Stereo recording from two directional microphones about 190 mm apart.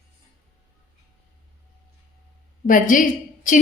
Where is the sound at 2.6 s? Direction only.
45° left (ahead or behind).